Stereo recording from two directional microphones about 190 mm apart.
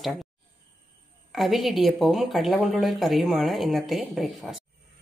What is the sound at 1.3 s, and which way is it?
Speech, centre (ahead or behind).